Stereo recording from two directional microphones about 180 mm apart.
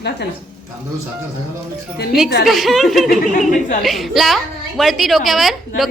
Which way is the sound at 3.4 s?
45° left (ahead or behind).